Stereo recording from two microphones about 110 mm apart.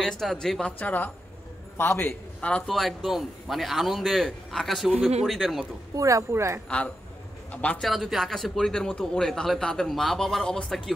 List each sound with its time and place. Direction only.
0.2 s a man's voice: 5° left (ahead or behind)
5.9 s speech: 30° right (ahead or behind)
7.5 s speech: 15° left (ahead or behind)
7.8 s a man's voice: centre (ahead or behind)